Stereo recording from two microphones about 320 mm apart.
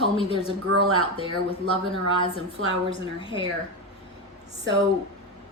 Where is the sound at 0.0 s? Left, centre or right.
Centre.